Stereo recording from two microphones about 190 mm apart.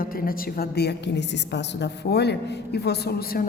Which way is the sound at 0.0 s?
50° left (ahead or behind).